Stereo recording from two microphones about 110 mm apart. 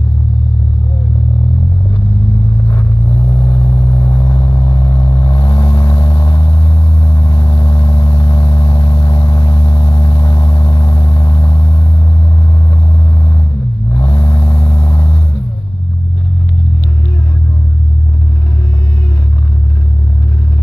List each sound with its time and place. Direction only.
2.7 s vehicle: 30° left (ahead or behind)
3.2 s vehicle: 40° left (ahead or behind)
4.4 s vehicle: 45° left (ahead or behind)
6.1 s vehicle: 40° left (ahead or behind)
13.9 s vehicle: 40° left (ahead or behind)